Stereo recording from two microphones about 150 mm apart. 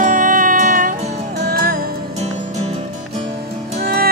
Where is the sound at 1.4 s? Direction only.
90° right.